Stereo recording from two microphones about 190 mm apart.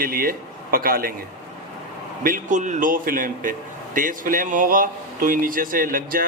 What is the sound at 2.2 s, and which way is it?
Speech, 45° right (ahead or behind).